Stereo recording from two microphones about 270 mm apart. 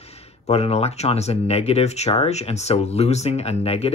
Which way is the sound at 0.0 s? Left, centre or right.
Left.